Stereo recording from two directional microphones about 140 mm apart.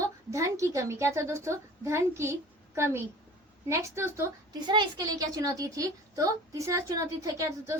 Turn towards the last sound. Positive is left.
turn(degrees=-25)  # may be behind; listen again after turning